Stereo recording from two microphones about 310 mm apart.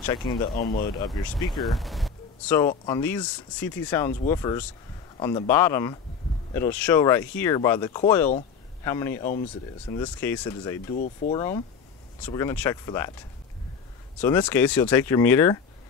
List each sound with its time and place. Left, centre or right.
0.0 s speech: centre
0.6 s speech: left
0.9 s speech: centre
1.5 s speech: centre
14.2 s speech: centre